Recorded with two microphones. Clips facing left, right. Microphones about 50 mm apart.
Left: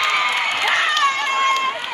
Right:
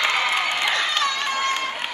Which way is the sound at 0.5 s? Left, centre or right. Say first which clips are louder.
Left 4 dB; left.